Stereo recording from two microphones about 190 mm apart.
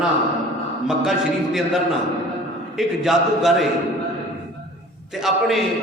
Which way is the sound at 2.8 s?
Centre (ahead or behind).